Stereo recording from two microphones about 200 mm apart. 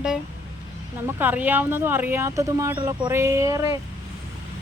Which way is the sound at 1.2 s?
10° right (ahead or behind).